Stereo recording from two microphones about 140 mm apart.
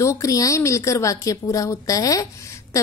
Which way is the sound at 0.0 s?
20° left (ahead or behind).